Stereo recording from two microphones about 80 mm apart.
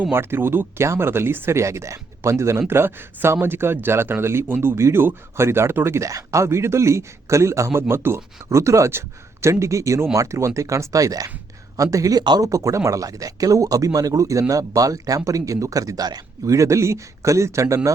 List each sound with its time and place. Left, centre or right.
0.0 s speech: right
16.5 s speech: right